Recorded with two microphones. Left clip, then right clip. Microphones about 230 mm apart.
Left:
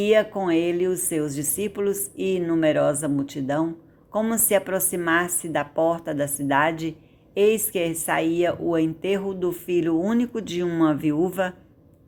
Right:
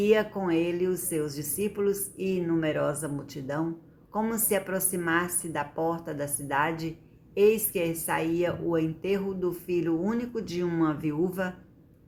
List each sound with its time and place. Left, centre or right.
0.0 s a woman's voice: left